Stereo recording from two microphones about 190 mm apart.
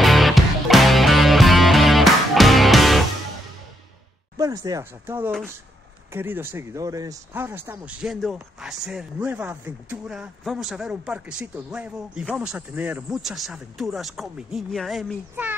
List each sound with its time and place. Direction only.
0.0 s music: centre (ahead or behind)
4.4 s speech: 20° right (ahead or behind)